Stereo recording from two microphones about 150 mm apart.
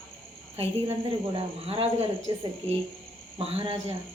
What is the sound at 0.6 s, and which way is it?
Speech, 40° right (ahead or behind).